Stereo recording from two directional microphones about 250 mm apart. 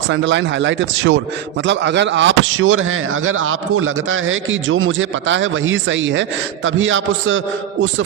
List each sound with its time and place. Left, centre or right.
0.1 s speech: right